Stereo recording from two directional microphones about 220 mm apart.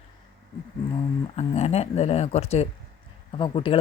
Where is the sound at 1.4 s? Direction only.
30° left (ahead or behind).